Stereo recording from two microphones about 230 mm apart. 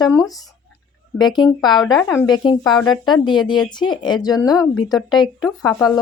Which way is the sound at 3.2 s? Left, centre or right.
Centre.